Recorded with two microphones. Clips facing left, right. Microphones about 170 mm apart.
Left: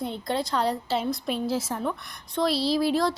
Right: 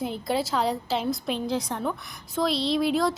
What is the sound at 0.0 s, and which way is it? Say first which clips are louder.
A woman's voice: right 1 dB; 5° right (ahead or behind).